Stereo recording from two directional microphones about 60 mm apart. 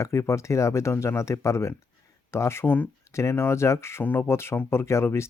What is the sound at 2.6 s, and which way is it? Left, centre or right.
Speech, left.